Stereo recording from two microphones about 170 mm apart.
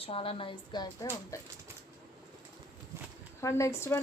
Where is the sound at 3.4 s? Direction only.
15° left (ahead or behind).